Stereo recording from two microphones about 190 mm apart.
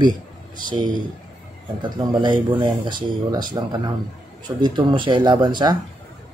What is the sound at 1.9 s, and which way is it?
Speech, 25° right (ahead or behind).